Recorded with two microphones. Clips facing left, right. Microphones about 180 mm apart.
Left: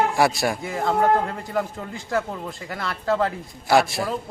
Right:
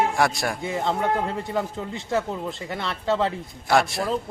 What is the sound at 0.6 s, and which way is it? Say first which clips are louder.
Speech: left 3 dB; 25° right (ahead or behind).